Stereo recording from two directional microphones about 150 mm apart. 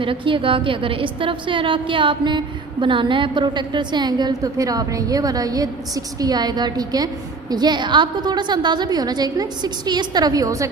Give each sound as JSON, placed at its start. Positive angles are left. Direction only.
{"t": 0.0, "sound": "a woman's voice", "side_deg": -35}